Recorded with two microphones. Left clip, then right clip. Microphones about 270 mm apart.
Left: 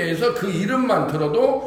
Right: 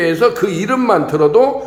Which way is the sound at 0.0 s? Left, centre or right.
Centre.